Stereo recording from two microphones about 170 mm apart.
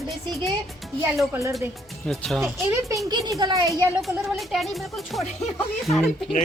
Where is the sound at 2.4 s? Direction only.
15° right (ahead or behind).